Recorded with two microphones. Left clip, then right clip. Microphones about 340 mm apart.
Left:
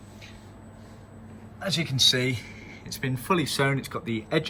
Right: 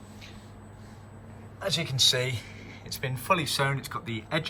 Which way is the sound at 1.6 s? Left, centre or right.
Centre.